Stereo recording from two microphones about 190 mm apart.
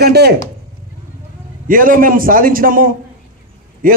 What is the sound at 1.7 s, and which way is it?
A man's voice, 45° right (ahead or behind).